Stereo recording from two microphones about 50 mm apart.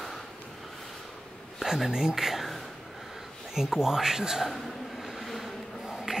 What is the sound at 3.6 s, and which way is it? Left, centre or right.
Speech, centre.